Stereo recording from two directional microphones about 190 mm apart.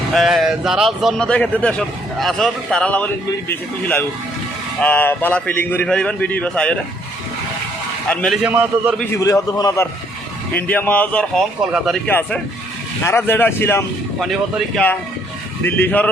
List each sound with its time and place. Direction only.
0.1 s a man's voice: centre (ahead or behind)
8.0 s speech: 5° left (ahead or behind)
8.4 s a man's voice: 10° right (ahead or behind)
9.1 s a man's voice: 15° left (ahead or behind)